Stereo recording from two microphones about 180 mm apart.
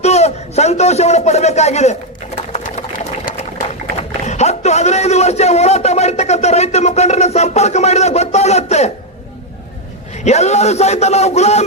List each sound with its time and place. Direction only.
0.0 s a sound: 35° left (ahead or behind)
2.5 s sewing machine: 40° left (ahead or behind)
4.2 s a man's voice: 40° left (ahead or behind)
10.2 s speech: 40° left (ahead or behind)